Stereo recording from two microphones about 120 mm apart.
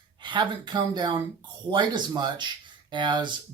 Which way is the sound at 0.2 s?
40° right (ahead or behind).